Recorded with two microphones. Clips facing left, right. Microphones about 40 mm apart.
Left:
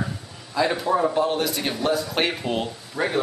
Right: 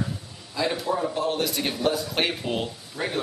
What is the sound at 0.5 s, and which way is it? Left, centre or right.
Speech, centre.